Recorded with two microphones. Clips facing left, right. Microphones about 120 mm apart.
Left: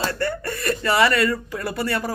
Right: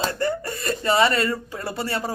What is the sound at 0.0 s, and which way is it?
Speech, 25° right (ahead or behind).